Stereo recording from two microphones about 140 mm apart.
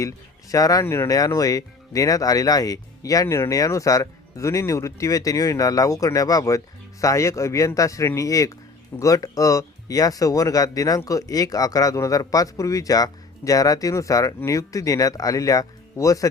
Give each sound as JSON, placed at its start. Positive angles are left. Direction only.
{"t": 0.5, "sound": "speech", "side_deg": 25}